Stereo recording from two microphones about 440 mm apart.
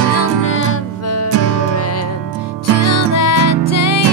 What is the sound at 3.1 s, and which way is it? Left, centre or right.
Music, left.